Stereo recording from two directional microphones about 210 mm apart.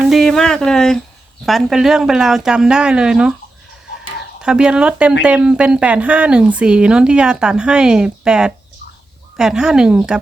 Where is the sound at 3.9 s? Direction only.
5° right (ahead or behind).